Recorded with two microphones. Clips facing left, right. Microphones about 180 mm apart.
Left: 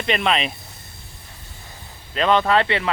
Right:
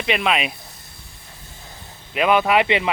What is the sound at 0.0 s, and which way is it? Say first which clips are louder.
Speech: even; 5° right (ahead or behind).